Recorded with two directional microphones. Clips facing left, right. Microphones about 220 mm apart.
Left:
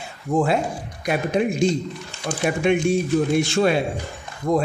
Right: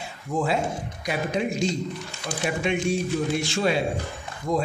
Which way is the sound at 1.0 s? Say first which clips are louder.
Left 5 dB; 55° left (ahead or behind).